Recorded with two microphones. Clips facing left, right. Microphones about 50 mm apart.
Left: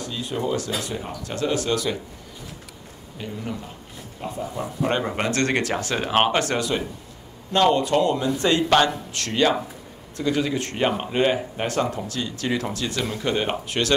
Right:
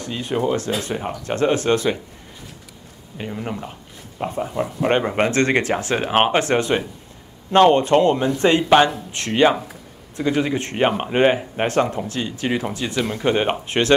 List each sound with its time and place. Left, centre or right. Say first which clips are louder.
0.0 s speech: right 5 dB; right
3.2 s speech: right 4 dB; right